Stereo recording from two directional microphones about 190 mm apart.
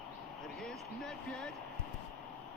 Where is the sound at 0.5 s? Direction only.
5° left (ahead or behind).